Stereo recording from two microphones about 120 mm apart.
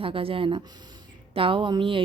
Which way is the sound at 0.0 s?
50° right (ahead or behind).